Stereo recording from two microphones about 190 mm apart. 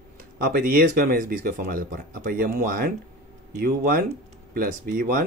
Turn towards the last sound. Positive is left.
turn(degrees=-50)  # may be behind; listen again after turning